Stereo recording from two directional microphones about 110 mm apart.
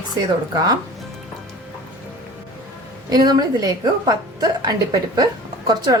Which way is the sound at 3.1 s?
40° right (ahead or behind).